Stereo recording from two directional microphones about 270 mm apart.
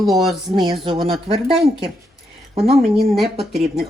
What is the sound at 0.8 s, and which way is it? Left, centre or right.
Speech, centre.